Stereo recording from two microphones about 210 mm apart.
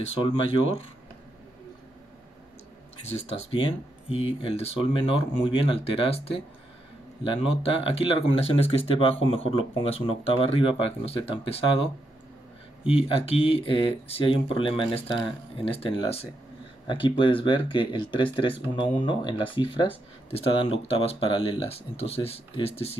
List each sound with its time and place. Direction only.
0.2 s speech: 30° left (ahead or behind)
3.2 s speech: 30° left (ahead or behind)
12.8 s speech: 25° left (ahead or behind)